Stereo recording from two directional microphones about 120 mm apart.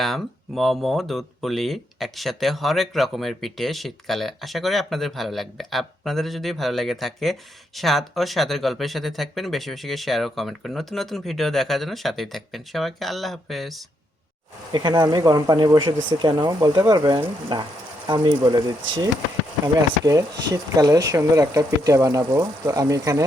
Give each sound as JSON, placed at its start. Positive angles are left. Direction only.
{"t": 0.0, "sound": "speech", "side_deg": 0}
{"t": 14.7, "sound": "speech", "side_deg": -35}